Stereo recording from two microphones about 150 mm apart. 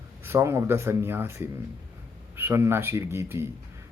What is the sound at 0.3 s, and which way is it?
A man's voice, 15° right (ahead or behind).